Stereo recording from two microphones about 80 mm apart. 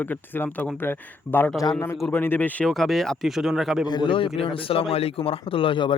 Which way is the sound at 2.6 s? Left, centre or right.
Centre.